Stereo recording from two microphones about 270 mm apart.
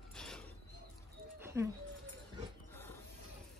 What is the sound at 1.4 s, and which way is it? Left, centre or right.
Dog, centre.